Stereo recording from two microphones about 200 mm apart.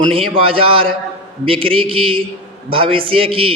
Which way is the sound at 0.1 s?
30° right (ahead or behind).